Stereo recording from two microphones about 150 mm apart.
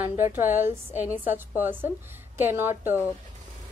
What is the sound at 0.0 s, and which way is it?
A woman's voice, 15° right (ahead or behind).